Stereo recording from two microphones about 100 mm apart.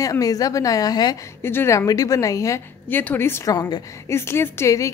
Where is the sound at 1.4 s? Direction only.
25° left (ahead or behind).